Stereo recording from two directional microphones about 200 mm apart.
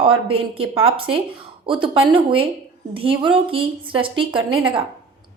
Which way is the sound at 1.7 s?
25° right (ahead or behind).